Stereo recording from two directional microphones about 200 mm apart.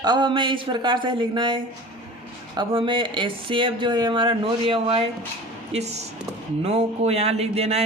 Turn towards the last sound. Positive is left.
turn(degrees=-30)  # may be behind; listen again after turning